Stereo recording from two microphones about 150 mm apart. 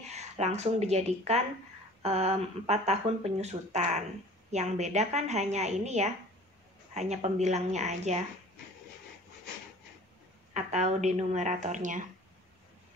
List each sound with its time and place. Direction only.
0.0 s speech: 50° right (ahead or behind)
10.5 s speech: 50° right (ahead or behind)